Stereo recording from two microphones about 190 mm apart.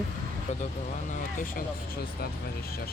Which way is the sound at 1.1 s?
45° left (ahead or behind).